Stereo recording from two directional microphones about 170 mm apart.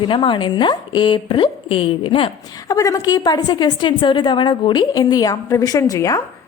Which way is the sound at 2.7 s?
20° left (ahead or behind).